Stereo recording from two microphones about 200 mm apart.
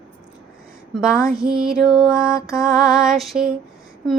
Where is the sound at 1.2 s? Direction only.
45° right (ahead or behind).